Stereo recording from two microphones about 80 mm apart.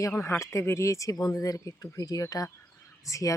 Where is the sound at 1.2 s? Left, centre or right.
Left.